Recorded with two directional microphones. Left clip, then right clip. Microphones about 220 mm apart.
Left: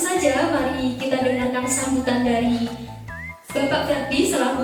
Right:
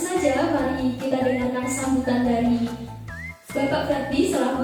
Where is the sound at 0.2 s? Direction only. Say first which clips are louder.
Left 1 dB; 10° right (ahead or behind).